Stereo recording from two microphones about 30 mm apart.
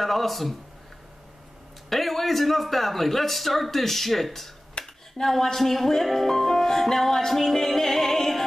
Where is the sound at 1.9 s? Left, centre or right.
Centre.